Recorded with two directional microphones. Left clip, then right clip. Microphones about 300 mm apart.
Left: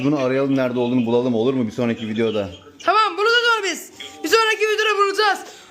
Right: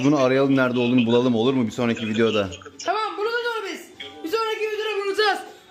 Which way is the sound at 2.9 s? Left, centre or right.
Left.